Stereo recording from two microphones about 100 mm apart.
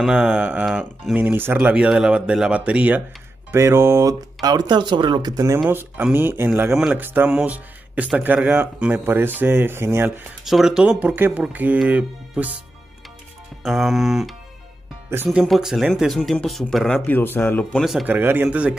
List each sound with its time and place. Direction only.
0.0 s speech: 10° right (ahead or behind)
3.5 s speech: 30° right (ahead or behind)
5.7 s speech: 20° right (ahead or behind)
7.3 s music: 15° right (ahead or behind)
8.4 s speech: 10° right (ahead or behind)
10.4 s speech: 5° right (ahead or behind)
13.7 s speech: centre (ahead or behind)
15.1 s speech: 25° right (ahead or behind)
15.4 s speech: centre (ahead or behind)
16.9 s speech: 15° left (ahead or behind)
17.7 s speech: centre (ahead or behind)
18.0 s speech: 20° right (ahead or behind)